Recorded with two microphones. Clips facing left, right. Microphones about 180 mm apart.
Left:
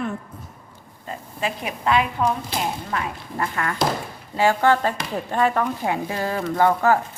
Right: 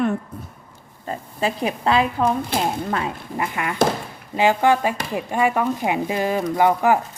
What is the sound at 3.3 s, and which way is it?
Speech, 15° right (ahead or behind).